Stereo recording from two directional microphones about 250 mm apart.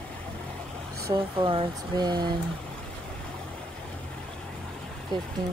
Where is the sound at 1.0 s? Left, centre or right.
Centre.